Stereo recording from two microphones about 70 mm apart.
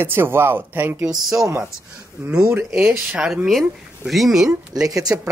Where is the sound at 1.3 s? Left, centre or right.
Right.